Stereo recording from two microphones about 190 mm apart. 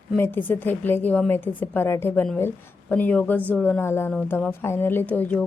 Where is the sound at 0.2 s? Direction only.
10° left (ahead or behind).